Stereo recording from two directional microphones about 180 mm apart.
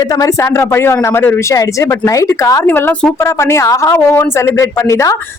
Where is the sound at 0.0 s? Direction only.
20° left (ahead or behind).